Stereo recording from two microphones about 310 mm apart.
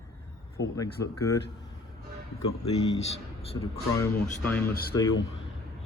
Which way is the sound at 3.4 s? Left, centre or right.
Centre.